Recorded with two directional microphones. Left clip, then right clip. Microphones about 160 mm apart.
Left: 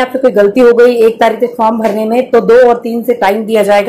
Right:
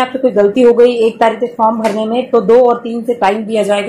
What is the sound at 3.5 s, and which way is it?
Speech, 10° left (ahead or behind).